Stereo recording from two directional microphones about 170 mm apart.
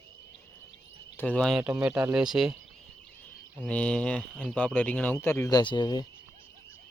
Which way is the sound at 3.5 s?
5° left (ahead or behind).